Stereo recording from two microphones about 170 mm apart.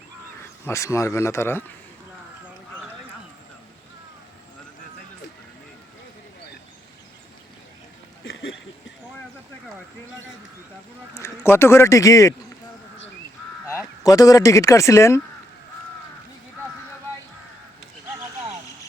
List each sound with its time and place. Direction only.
0.6 s speech: 15° left (ahead or behind)
11.1 s speech: 15° left (ahead or behind)
14.0 s speech: 20° left (ahead or behind)